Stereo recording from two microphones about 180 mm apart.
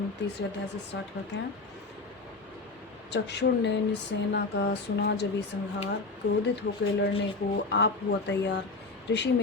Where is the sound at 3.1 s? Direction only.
75° left (ahead or behind).